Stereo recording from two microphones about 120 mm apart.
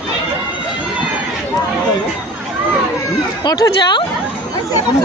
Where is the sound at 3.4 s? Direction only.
30° left (ahead or behind).